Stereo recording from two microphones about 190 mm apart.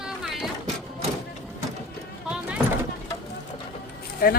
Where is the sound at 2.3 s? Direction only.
5° right (ahead or behind).